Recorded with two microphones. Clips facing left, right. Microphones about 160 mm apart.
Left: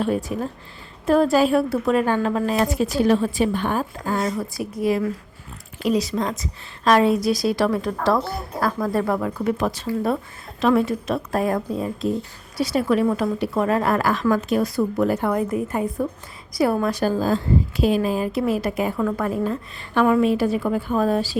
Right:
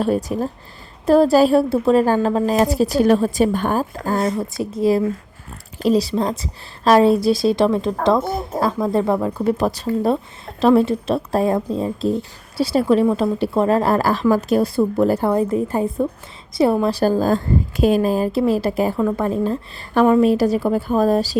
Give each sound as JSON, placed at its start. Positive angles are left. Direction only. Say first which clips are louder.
{"t": 0.0, "sound": "a woman's voice", "louder": "right 3 dB", "side_deg": -40}
{"t": 4.3, "sound": "a woman's voice", "louder": "right 4 dB", "side_deg": -25}
{"t": 18.9, "sound": "a woman's voice", "louder": "right 3 dB", "side_deg": -20}